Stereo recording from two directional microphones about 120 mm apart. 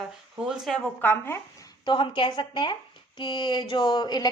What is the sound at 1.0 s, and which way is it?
Speech, 15° left (ahead or behind).